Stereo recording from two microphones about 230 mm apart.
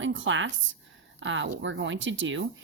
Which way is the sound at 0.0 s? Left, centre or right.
Right.